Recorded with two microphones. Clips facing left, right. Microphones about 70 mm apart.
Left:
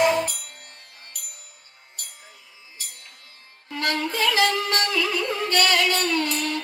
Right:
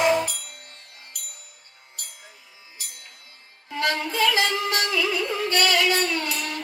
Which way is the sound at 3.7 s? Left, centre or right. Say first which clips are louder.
Even; right.